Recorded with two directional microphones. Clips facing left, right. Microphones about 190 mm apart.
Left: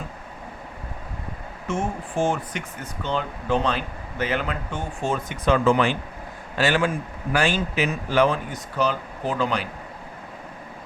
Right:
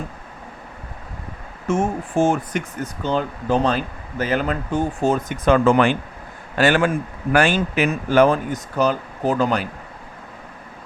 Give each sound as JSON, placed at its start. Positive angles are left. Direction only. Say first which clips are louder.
{"t": 1.6, "sound": "a man's voice", "louder": "right 6 dB", "side_deg": -45}